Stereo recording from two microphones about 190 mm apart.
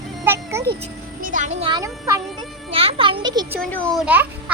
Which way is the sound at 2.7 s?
30° right (ahead or behind).